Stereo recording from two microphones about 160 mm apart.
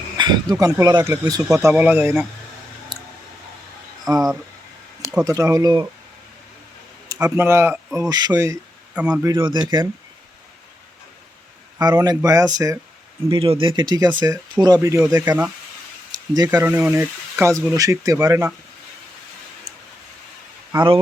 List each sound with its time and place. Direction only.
0.6 s speech: 25° right (ahead or behind)
1.6 s speech: 10° right (ahead or behind)
4.1 s speech: 25° right (ahead or behind)
7.1 s speech: 15° right (ahead or behind)
9.0 s speech: 5° right (ahead or behind)
9.4 s speech: 30° right (ahead or behind)
11.8 s speech: 25° right (ahead or behind)
13.3 s speech: 35° right (ahead or behind); by 15.4 s 20° right (ahead or behind)
16.1 s a sound: 25° right (ahead or behind)
16.5 s speech: 15° right (ahead or behind)
20.7 s speech: 30° right (ahead or behind)